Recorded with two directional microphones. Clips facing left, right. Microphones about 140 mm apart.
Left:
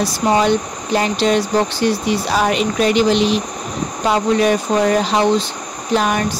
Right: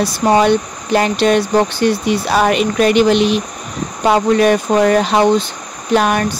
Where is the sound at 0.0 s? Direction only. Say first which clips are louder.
Right 3 dB; 60° right (ahead or behind).